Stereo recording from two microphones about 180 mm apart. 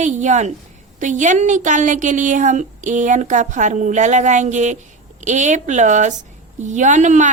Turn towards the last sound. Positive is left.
turn(degrees=-40)  # may be behind; listen again after turning